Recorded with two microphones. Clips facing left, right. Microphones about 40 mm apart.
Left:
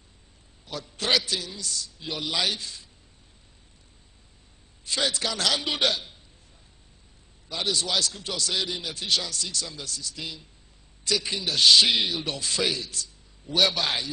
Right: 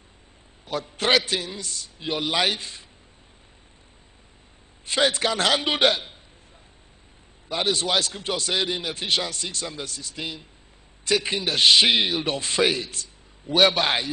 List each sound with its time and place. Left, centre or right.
0.7 s a man's voice: right
4.8 s a man's voice: right
7.4 s a man's voice: right